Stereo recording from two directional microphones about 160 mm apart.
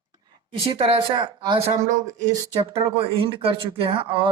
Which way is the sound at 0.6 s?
35° right (ahead or behind).